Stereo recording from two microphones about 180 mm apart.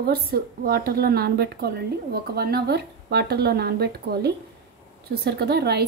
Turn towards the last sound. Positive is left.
turn(degrees=-65)  # may be behind; listen again after turning